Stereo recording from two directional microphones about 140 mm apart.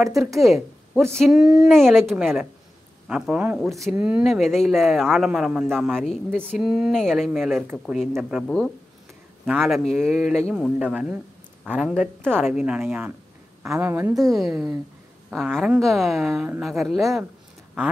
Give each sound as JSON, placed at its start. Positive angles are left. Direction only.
{"t": 0.0, "sound": "speech", "side_deg": 0}
{"t": 9.5, "sound": "speech", "side_deg": 0}
{"t": 12.4, "sound": "speech", "side_deg": -5}
{"t": 14.3, "sound": "speech", "side_deg": -5}